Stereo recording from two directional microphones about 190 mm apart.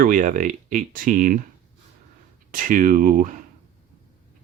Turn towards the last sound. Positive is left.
turn(degrees=-45)  # may be behind; listen again after turning